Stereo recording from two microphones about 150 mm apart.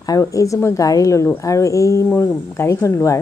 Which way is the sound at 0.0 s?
25° left (ahead or behind).